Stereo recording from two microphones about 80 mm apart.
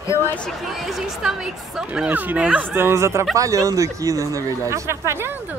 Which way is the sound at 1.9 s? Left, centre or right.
Centre.